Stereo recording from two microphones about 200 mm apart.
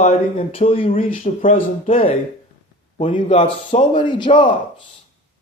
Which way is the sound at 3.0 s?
25° left (ahead or behind).